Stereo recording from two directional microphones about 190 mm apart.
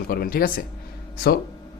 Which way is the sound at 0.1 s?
50° left (ahead or behind).